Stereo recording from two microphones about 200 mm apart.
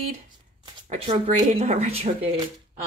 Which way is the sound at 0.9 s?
35° right (ahead or behind).